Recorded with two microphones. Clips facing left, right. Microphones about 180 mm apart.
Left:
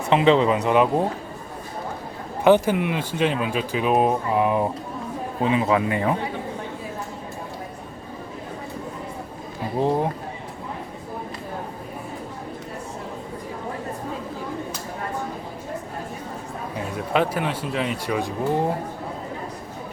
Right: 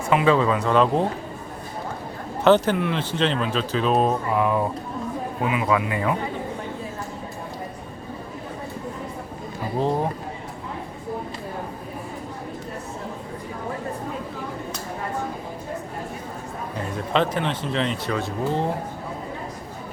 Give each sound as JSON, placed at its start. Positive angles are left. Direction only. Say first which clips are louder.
{"t": 0.1, "sound": "a man's voice", "louder": "left 2 dB", "side_deg": 25}
{"t": 2.4, "sound": "a man's voice", "louder": "left 1 dB", "side_deg": 10}
{"t": 17.1, "sound": "speech", "louder": "even", "side_deg": 10}